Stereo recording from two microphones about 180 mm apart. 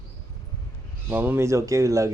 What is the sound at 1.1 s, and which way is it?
Speech, 10° right (ahead or behind).